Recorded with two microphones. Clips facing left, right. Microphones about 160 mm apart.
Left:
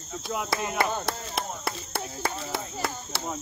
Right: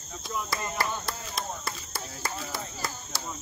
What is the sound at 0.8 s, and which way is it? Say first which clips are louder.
Speech: left 5 dB; 50° left (ahead or behind).